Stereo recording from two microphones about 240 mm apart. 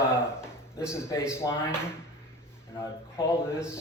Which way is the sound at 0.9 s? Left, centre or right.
Centre.